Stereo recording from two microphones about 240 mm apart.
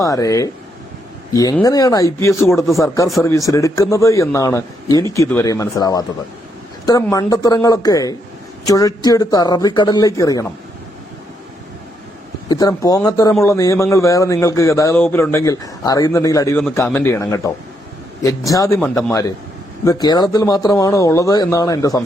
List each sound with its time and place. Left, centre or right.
0.0 s a man's voice: centre
12.5 s a man's voice: centre